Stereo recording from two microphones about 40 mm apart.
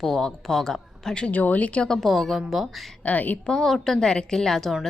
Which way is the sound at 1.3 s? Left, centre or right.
Left.